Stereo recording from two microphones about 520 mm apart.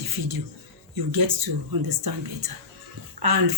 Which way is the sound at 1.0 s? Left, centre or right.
Right.